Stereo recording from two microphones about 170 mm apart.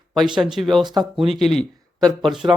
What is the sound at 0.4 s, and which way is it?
Speech, centre (ahead or behind).